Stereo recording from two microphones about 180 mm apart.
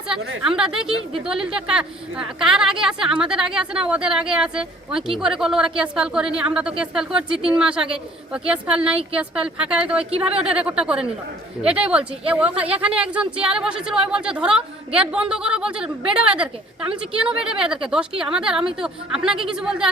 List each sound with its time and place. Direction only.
0.1 s a woman's voice: 5° right (ahead or behind)
10.1 s speech: 35° right (ahead or behind)
10.5 s a woman's voice: 5° right (ahead or behind)